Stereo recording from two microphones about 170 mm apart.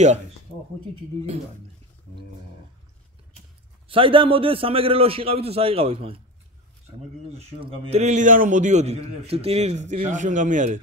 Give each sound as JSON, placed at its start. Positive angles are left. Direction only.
{"t": 3.3, "sound": "a man's voice", "side_deg": -30}
{"t": 7.3, "sound": "a man's voice", "side_deg": -35}